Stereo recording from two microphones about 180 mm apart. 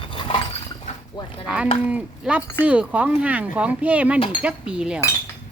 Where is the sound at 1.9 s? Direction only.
5° right (ahead or behind).